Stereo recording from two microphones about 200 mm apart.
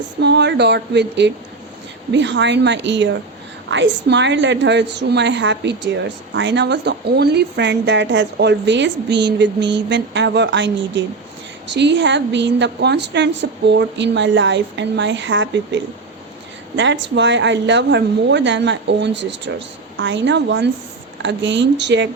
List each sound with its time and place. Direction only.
0.2 s a woman's voice: 60° right (ahead or behind)